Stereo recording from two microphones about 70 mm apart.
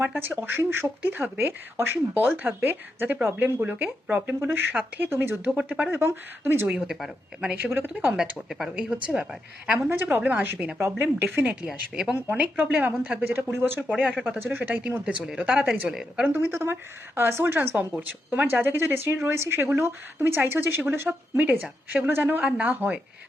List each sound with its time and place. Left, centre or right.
0.0 s speech: right
5.5 s speech: centre
5.9 s speech: right
6.7 s speech: centre
7.5 s speech: right
8.4 s a woman's voice: centre
8.7 s speech: centre
9.9 s speech: right
11.7 s speech: centre
12.1 s speech: right
13.7 s speech: centre
15.9 s a woman's voice: centre
16.2 s speech: right